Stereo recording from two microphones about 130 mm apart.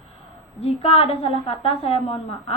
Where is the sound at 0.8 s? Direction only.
50° left (ahead or behind).